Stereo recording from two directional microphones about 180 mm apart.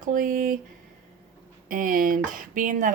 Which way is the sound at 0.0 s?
50° right (ahead or behind).